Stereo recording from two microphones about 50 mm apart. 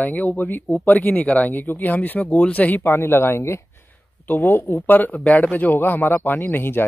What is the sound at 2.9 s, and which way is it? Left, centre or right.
Speech, left.